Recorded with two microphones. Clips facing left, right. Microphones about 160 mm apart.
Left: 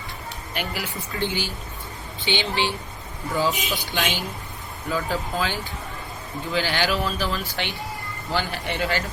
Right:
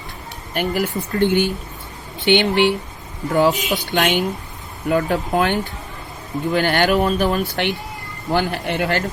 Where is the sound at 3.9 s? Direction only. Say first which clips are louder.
Right 11 dB; 60° right (ahead or behind).